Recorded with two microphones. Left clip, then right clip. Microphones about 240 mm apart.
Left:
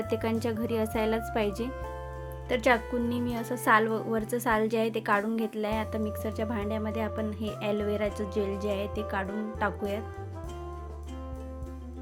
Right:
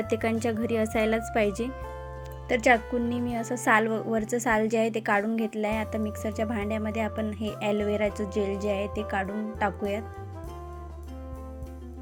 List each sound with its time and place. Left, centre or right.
0.0 s speech: centre